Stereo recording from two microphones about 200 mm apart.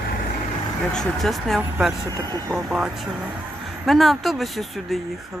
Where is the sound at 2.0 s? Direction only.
20° right (ahead or behind).